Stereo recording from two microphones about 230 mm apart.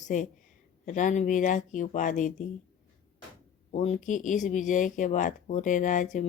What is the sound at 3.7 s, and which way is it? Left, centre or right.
Speech, left.